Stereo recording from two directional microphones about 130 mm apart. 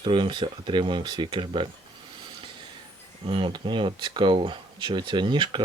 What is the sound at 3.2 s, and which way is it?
Speech, 40° right (ahead or behind).